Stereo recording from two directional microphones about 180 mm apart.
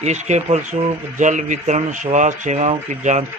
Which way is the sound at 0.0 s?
40° right (ahead or behind).